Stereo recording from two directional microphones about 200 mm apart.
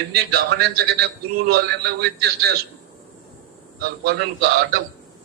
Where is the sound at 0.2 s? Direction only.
50° right (ahead or behind).